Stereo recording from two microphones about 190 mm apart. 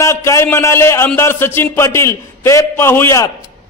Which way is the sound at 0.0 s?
15° left (ahead or behind).